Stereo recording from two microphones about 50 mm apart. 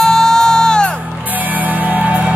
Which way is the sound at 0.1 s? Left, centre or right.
Centre.